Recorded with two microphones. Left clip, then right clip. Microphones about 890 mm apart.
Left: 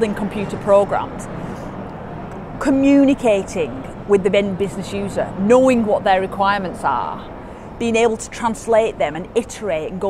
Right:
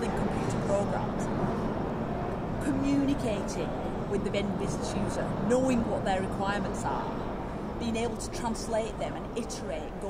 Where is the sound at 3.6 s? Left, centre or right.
Left.